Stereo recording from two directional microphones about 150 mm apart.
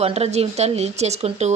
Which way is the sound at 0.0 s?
45° right (ahead or behind).